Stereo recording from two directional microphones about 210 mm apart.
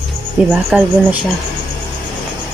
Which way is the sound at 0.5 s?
5° right (ahead or behind).